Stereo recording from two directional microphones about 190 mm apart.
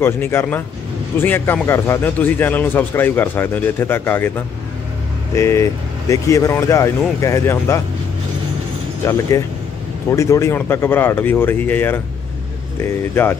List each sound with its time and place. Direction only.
0.0 s a man's voice: 10° left (ahead or behind)
5.3 s a man's voice: 15° left (ahead or behind)
9.0 s a man's voice: 15° left (ahead or behind)
13.1 s a man's voice: 10° left (ahead or behind)